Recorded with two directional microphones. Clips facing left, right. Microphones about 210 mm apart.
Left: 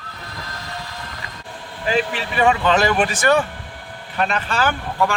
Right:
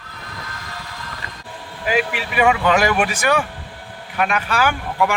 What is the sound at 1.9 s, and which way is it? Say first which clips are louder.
Speech: even; 10° right (ahead or behind).